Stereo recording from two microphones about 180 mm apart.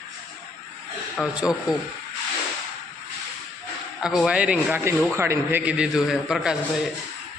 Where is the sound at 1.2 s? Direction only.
5° right (ahead or behind).